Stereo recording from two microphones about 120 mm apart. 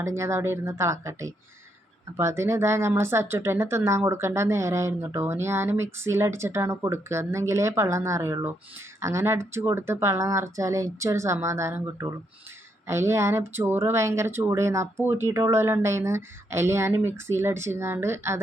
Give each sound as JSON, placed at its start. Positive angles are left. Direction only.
{"t": 0.0, "sound": "speech", "side_deg": -25}